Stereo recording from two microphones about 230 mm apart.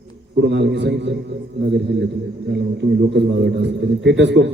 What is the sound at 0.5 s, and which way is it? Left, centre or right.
Speech, right.